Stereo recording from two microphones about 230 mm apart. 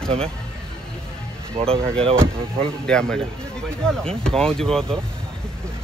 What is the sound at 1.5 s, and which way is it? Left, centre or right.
Speech, right.